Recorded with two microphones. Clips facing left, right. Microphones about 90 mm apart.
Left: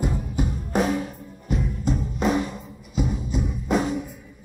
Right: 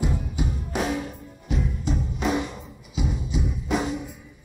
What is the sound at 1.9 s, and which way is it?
Music, centre (ahead or behind).